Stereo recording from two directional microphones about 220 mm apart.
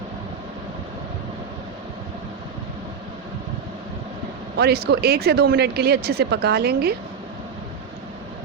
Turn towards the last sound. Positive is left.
turn(degrees=-45)  # may be behind; listen again after turning